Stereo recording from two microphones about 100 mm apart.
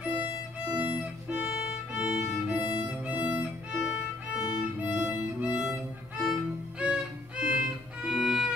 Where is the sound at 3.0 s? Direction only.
15° right (ahead or behind).